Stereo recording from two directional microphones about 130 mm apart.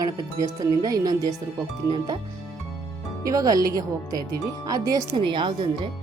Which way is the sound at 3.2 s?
25° right (ahead or behind).